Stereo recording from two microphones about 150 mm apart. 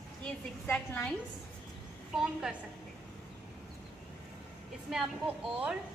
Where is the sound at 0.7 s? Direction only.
10° left (ahead or behind).